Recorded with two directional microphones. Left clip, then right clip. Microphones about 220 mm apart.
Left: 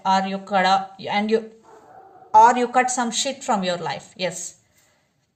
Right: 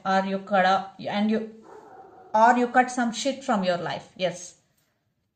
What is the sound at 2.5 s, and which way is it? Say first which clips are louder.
A woman's voice: left 2 dB; 35° left (ahead or behind).